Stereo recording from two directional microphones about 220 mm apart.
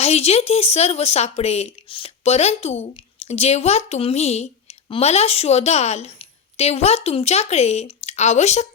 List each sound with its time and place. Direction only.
0.0 s speech: 30° left (ahead or behind)